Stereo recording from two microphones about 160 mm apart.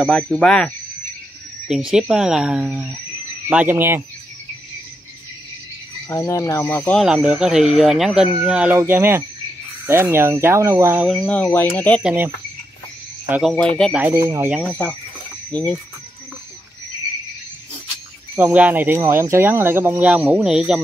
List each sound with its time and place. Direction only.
0.0 s speech: 5° left (ahead or behind)
1.7 s speech: 5° right (ahead or behind)
6.0 s speech: 20° left (ahead or behind)
7.0 s speech: 5° right (ahead or behind)
11.1 s speech: 5° left (ahead or behind)
12.0 s speech: 5° right (ahead or behind)
13.3 s speech: centre (ahead or behind)
13.9 s speech: 15° right (ahead or behind)
14.6 s speech: 10° left (ahead or behind)
18.3 s speech: 10° right (ahead or behind)